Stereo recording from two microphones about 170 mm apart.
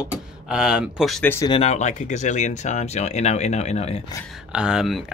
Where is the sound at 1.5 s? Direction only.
35° left (ahead or behind).